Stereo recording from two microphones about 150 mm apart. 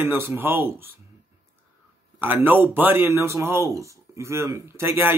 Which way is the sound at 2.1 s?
15° right (ahead or behind).